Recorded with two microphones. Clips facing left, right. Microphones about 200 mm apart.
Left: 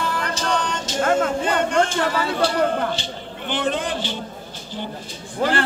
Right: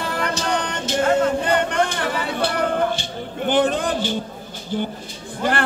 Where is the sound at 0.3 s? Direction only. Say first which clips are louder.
Even; 60° right (ahead or behind).